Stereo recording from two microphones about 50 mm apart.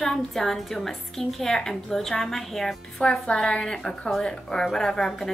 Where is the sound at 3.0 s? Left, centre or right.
Centre.